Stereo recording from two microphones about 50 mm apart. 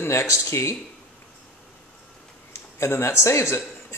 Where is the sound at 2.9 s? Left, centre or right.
Left.